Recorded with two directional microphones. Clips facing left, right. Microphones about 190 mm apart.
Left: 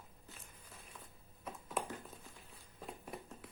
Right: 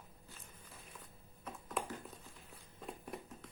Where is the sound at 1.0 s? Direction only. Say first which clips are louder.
Left 2 dB; centre (ahead or behind).